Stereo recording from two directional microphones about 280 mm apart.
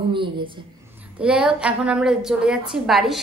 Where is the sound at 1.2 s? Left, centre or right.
Centre.